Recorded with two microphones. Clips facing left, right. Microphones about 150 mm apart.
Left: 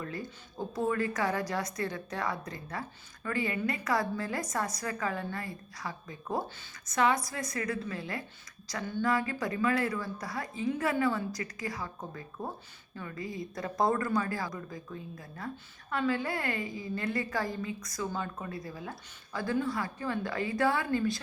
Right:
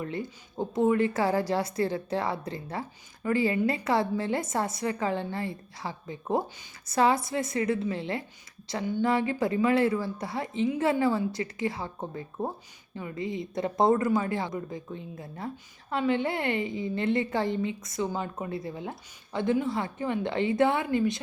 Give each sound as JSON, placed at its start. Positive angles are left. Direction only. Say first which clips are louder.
{"t": 0.0, "sound": "speech", "louder": "right 5 dB", "side_deg": -20}
{"t": 8.8, "sound": "a sound", "louder": "right 5 dB", "side_deg": -15}
{"t": 9.0, "sound": "speech", "louder": "right 4 dB", "side_deg": -25}